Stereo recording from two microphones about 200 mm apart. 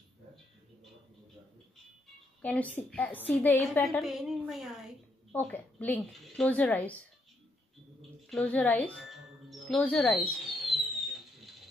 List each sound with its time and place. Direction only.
2.4 s speech: 5° left (ahead or behind)
4.0 s a woman's voice: centre (ahead or behind)
5.3 s speech: 10° left (ahead or behind)
8.3 s music: 5° left (ahead or behind)